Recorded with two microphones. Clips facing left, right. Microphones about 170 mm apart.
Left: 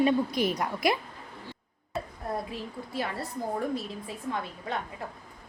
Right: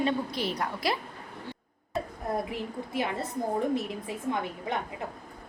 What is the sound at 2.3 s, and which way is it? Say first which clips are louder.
A woman's voice: right 3 dB; 20° right (ahead or behind).